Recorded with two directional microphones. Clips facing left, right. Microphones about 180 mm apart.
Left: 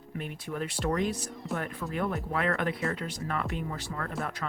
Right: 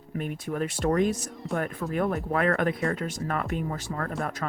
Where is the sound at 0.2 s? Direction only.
45° right (ahead or behind).